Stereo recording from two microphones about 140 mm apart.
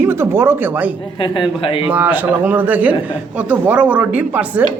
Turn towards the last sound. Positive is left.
turn(degrees=-10)  # may be behind; listen again after turning